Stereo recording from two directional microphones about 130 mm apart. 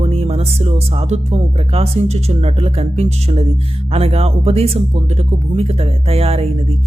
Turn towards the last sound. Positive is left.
turn(degrees=-50)  # may be behind; listen again after turning